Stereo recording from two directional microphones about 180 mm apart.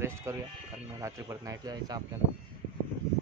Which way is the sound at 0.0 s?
15° right (ahead or behind).